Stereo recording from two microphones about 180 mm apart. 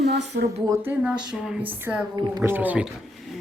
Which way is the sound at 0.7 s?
10° right (ahead or behind).